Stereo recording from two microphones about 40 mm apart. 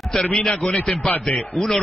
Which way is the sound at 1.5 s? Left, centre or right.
Centre.